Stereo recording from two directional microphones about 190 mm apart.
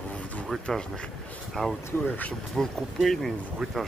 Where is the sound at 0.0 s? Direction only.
5° left (ahead or behind).